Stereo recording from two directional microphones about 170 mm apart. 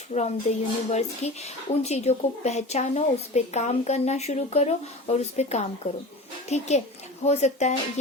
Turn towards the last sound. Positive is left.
turn(degrees=40)  # may be behind; listen again after turning